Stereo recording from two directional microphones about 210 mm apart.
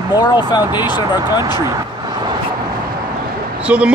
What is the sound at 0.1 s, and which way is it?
Speech, 20° left (ahead or behind).